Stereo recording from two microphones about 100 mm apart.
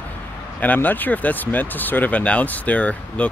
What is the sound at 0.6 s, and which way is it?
Speech, 15° left (ahead or behind).